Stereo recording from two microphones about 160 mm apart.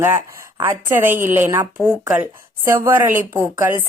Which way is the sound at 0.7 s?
15° right (ahead or behind).